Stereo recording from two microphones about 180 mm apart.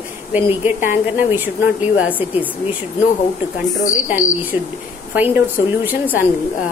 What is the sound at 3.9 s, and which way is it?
Speech, 5° right (ahead or behind).